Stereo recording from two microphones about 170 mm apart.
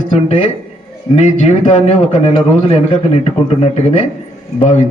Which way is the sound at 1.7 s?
40° left (ahead or behind).